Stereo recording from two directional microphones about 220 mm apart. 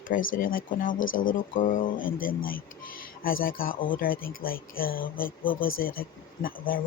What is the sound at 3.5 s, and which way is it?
Speech, 65° left (ahead or behind).